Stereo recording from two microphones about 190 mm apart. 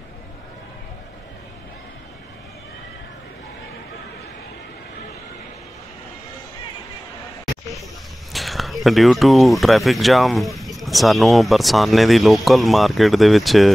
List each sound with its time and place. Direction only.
8.3 s speech: centre (ahead or behind)